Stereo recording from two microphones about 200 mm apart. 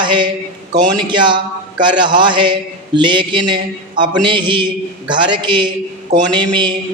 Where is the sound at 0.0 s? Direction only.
25° right (ahead or behind).